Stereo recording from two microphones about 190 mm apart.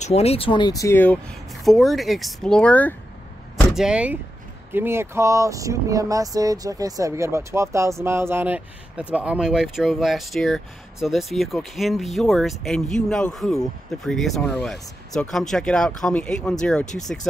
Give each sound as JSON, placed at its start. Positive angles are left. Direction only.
{"t": 0.0, "sound": "speech", "side_deg": 35}
{"t": 3.7, "sound": "speech", "side_deg": -5}